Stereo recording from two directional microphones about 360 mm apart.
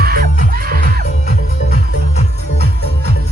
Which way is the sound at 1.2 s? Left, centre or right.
Left.